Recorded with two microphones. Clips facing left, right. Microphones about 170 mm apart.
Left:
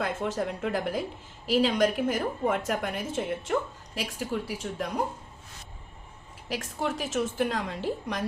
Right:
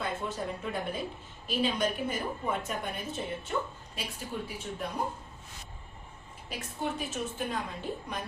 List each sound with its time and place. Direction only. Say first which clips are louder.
0.0 s a woman's voice: left 5 dB; 90° left
6.5 s a woman's voice: left 4 dB; 90° left